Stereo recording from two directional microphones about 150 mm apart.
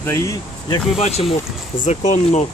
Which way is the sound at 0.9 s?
45° left (ahead or behind).